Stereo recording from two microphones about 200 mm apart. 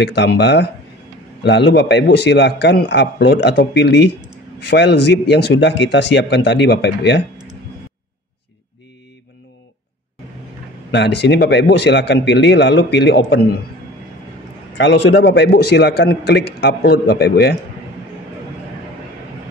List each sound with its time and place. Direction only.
0.0 s a man's voice: 60° left (ahead or behind)
10.9 s a man's voice: 60° left (ahead or behind)
14.8 s a man's voice: 60° left (ahead or behind)